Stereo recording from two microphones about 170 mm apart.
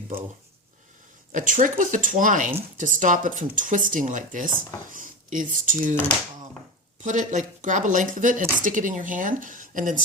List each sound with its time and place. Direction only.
1.3 s speech: 50° right (ahead or behind)